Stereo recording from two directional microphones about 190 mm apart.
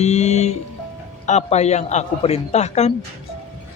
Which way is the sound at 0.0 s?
35° left (ahead or behind).